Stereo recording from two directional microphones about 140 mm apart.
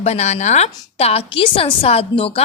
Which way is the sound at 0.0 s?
50° left (ahead or behind).